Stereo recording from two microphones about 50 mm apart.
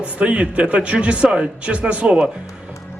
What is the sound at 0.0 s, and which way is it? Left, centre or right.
A man's voice, right.